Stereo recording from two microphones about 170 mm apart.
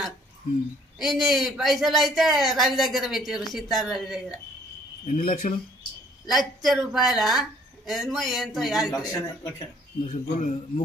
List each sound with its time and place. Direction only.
0.9 s speech: centre (ahead or behind)
5.0 s speech: 50° left (ahead or behind)
6.2 s speech: centre (ahead or behind)
10.0 s speech: 40° left (ahead or behind)